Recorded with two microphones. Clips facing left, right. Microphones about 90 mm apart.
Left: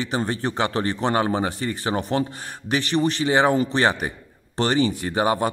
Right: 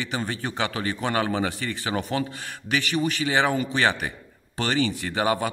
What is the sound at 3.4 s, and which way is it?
Speech, 30° left (ahead or behind).